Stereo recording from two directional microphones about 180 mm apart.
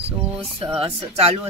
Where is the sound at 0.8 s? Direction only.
30° right (ahead or behind).